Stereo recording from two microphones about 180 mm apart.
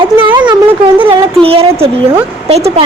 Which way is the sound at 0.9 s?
30° right (ahead or behind).